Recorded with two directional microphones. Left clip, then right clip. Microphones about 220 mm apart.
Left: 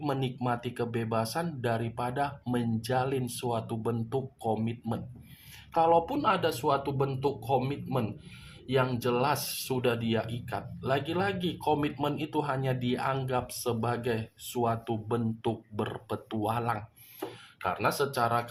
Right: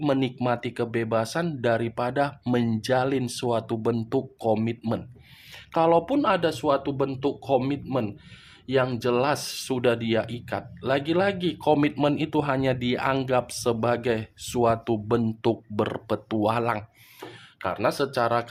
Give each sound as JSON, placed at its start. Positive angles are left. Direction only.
{"t": 0.0, "sound": "speech", "side_deg": -40}